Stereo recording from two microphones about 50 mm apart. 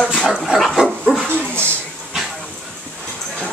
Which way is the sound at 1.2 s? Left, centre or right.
Right.